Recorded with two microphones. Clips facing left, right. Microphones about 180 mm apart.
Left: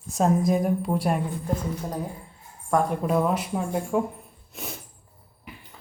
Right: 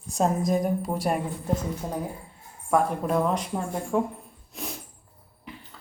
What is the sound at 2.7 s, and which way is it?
Speech, 5° left (ahead or behind).